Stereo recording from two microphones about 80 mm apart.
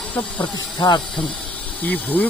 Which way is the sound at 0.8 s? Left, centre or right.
Left.